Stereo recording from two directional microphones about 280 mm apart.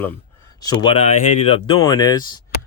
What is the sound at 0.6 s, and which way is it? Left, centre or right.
Speech, centre.